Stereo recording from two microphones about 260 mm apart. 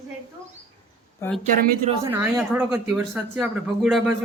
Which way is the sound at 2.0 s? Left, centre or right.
Centre.